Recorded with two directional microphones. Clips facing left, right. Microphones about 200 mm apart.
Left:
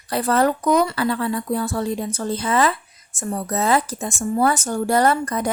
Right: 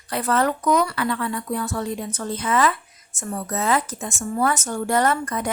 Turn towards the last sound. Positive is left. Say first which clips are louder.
# left 3 dB
turn(degrees=35)  # may be behind; listen again after turning